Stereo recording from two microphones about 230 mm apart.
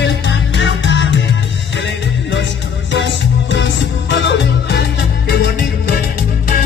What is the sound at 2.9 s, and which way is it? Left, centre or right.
Music, left.